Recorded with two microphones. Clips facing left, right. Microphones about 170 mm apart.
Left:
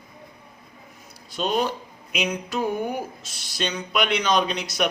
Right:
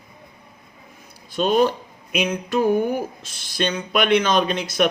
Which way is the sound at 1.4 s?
55° right (ahead or behind).